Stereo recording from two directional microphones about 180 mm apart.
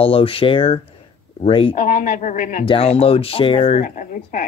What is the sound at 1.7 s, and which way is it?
Speech, 45° left (ahead or behind).